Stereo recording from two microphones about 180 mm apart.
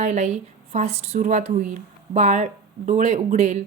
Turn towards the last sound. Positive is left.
turn(degrees=-40)  # may be behind; listen again after turning